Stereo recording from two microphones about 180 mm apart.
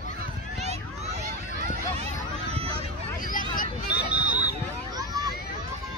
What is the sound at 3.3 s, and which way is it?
Vehicle, 50° left (ahead or behind).